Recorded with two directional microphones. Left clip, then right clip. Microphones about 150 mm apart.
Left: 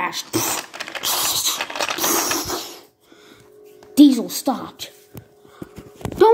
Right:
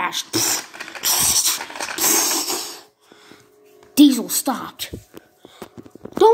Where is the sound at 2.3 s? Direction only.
5° right (ahead or behind).